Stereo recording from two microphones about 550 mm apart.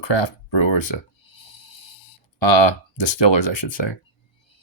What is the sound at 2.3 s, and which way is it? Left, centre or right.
Speech, left.